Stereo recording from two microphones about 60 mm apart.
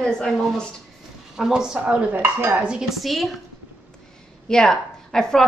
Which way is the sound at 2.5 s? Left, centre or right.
Centre.